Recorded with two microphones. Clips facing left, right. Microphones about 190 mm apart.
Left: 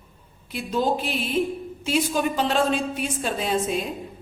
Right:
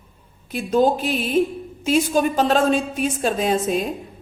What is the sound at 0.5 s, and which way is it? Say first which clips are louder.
A woman's voice: right 6 dB; 45° right (ahead or behind).